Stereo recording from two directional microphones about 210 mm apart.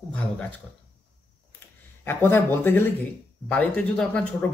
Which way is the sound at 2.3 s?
10° left (ahead or behind).